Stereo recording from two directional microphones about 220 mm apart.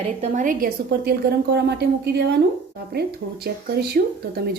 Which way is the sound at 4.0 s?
40° right (ahead or behind).